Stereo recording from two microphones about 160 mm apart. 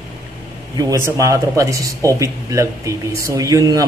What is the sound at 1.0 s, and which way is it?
Speech, 20° right (ahead or behind).